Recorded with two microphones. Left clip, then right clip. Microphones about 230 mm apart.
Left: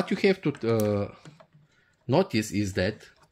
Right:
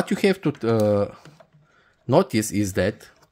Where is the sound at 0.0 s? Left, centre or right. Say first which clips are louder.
Right 3 dB; right.